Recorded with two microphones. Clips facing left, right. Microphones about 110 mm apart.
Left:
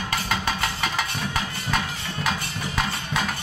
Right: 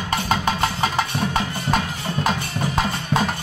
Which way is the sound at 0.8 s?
35° right (ahead or behind).